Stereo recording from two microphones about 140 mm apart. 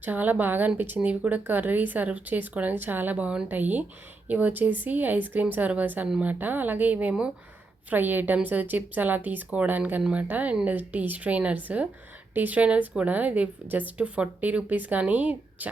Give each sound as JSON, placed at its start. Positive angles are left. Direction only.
{"t": 0.0, "sound": "a woman's voice", "side_deg": -10}